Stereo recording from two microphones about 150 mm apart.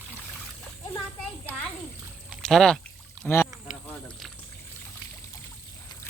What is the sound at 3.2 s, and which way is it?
Speech, 5° left (ahead or behind).